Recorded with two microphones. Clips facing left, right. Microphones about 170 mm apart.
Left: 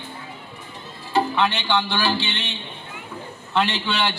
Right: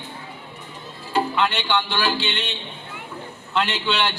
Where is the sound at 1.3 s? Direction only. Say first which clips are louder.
Left 1 dB; 15° left (ahead or behind).